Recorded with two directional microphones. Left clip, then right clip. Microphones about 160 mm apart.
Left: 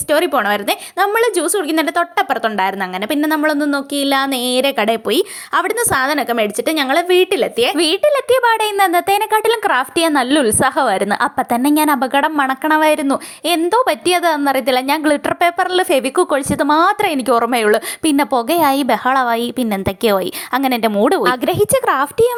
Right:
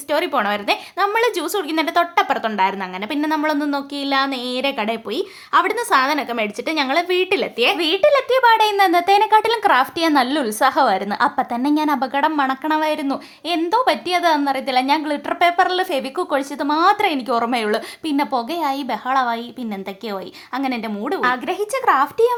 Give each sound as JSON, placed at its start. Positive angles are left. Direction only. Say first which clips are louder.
{"t": 0.1, "sound": "a woman's voice", "louder": "left 5 dB", "side_deg": 25}
{"t": 7.6, "sound": "speech", "louder": "left 1 dB", "side_deg": 45}